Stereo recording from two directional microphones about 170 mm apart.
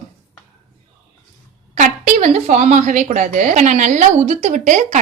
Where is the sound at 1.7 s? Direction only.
45° right (ahead or behind).